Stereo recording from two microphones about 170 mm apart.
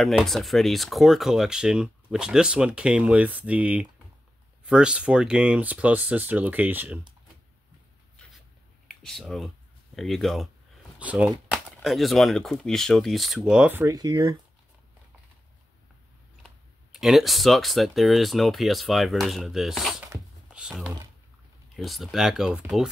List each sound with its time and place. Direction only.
0.0 s speech: centre (ahead or behind)
9.0 s speech: centre (ahead or behind)
13.9 s speech: 25° right (ahead or behind)
16.9 s speech: centre (ahead or behind)
20.5 s typing: 5° right (ahead or behind)
21.7 s speech: centre (ahead or behind)